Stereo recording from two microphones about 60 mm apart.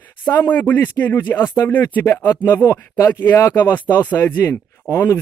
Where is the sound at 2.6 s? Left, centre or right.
Left.